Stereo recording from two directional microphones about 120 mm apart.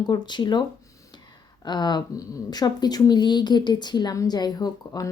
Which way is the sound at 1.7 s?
35° left (ahead or behind).